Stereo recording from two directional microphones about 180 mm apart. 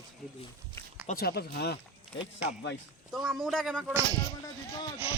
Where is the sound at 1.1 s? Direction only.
60° left (ahead or behind).